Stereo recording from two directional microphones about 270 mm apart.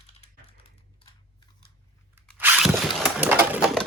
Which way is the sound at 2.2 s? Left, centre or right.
Centre.